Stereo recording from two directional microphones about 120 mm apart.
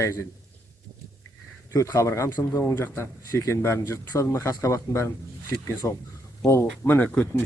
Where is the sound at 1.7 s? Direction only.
25° left (ahead or behind).